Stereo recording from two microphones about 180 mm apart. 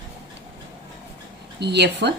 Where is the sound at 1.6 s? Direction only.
70° right (ahead or behind).